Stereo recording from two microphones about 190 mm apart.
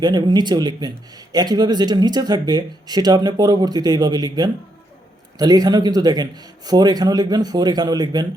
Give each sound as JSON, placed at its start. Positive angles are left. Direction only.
{"t": 0.0, "sound": "speech", "side_deg": -20}